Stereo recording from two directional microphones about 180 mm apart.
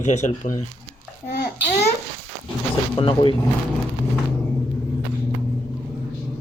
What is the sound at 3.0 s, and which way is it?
Speech, 30° left (ahead or behind).